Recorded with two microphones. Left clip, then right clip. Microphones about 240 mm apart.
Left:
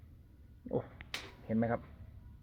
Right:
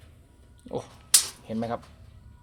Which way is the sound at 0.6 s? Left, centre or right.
Centre.